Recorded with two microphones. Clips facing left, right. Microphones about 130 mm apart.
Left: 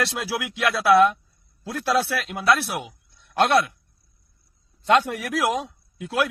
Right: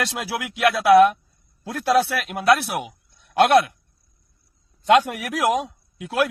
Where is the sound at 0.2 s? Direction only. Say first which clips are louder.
Right 4 dB; 45° right (ahead or behind).